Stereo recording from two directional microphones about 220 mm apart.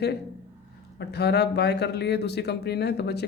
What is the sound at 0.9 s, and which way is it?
Speech, 50° left (ahead or behind).